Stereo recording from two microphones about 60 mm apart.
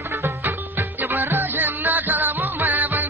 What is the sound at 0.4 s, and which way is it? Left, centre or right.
Music, right.